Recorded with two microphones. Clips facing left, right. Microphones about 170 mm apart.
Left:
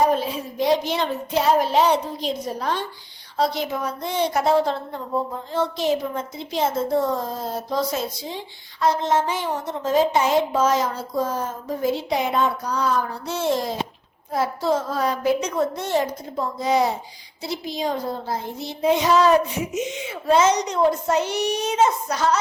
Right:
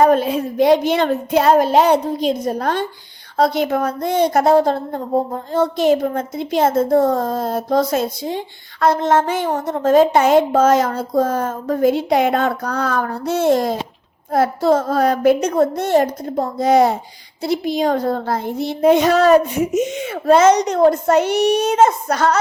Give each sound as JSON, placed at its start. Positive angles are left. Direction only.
{"t": 0.0, "sound": "a child's voice", "side_deg": -55}